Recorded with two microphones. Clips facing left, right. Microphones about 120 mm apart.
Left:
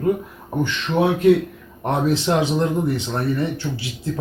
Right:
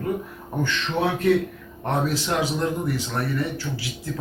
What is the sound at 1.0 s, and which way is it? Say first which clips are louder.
Speech: left 5 dB; 15° left (ahead or behind).